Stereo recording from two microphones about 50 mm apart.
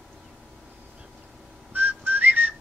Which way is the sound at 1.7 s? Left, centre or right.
Right.